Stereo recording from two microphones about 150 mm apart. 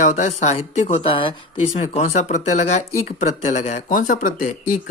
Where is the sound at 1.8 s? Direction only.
50° left (ahead or behind).